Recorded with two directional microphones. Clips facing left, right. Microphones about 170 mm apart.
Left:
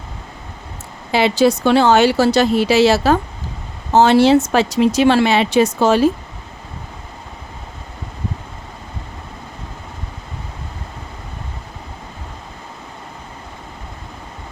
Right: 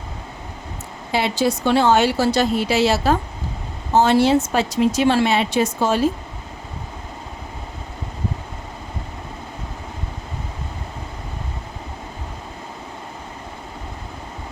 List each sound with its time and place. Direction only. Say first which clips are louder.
1.1 s speech: left 6 dB; 85° left